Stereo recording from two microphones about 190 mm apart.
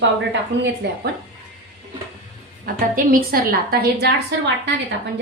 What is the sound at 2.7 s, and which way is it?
A woman's voice, 50° right (ahead or behind).